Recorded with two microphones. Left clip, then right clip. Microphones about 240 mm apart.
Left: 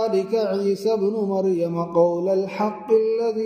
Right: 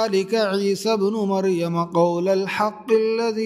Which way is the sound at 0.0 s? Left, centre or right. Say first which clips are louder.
Right 1 dB; right.